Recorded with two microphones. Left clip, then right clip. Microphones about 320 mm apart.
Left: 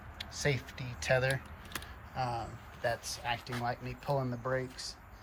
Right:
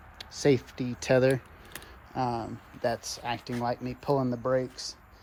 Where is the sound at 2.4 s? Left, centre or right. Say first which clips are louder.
Right 5 dB; centre.